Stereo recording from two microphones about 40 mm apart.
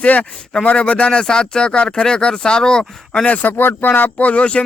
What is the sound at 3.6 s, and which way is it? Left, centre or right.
Speech, left.